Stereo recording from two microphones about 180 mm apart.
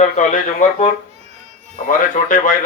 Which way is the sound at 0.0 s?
45° left (ahead or behind).